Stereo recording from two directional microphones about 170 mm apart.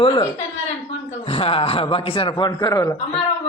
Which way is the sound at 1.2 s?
35° left (ahead or behind).